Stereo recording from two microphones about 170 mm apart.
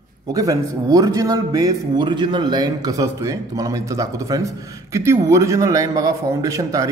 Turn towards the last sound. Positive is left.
turn(degrees=-20)  # may be behind; listen again after turning